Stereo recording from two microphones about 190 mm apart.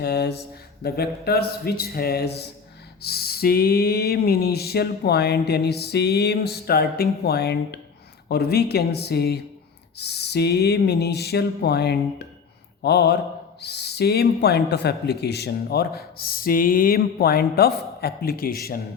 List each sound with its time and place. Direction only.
0.0 s speech: 60° left (ahead or behind)